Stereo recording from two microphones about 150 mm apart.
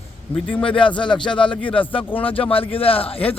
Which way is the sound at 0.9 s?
30° left (ahead or behind).